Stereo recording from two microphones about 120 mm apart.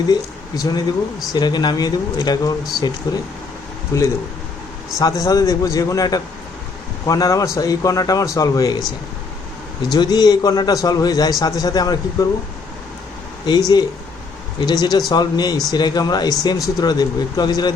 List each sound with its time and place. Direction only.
0.1 s a man's voice: 30° left (ahead or behind)
9.9 s a man's voice: 35° left (ahead or behind)
13.4 s a man's voice: 35° left (ahead or behind)